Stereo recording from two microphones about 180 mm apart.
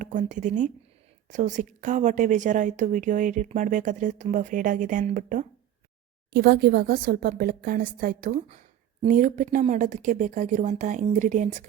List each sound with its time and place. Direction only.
0.0 s a woman's voice: 45° right (ahead or behind)
6.3 s a woman's voice: 60° right (ahead or behind); by 11.4 s 45° right (ahead or behind)